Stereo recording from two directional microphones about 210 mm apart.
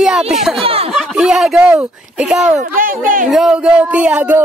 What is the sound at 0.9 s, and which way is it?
Speech, 5° right (ahead or behind).